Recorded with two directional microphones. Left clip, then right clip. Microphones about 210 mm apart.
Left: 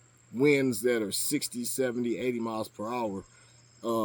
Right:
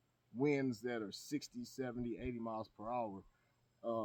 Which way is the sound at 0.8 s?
20° right (ahead or behind).